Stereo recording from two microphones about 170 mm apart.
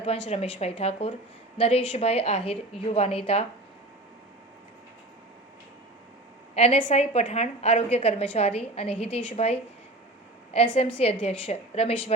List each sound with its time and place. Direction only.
0.0 s a woman's voice: 35° left (ahead or behind)
6.5 s a woman's voice: 35° left (ahead or behind)
10.8 s a woman's voice: 35° left (ahead or behind)